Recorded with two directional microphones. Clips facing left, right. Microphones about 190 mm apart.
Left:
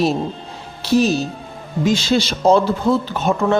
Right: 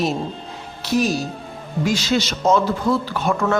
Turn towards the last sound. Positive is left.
turn(degrees=20)  # may be behind; listen again after turning